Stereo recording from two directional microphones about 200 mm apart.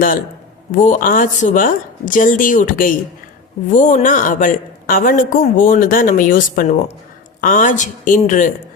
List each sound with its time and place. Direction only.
0.7 s a woman's voice: 40° left (ahead or behind)